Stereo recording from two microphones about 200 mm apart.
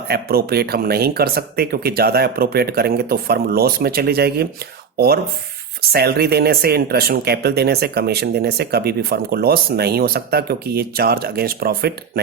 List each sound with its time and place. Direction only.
0.1 s speech: 50° right (ahead or behind)